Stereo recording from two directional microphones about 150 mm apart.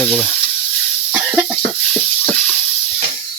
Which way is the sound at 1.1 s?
10° right (ahead or behind).